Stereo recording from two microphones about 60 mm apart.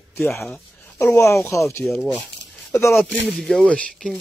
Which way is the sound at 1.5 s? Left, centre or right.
Left.